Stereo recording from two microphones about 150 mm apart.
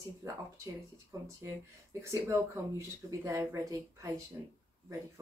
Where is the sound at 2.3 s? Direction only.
20° right (ahead or behind).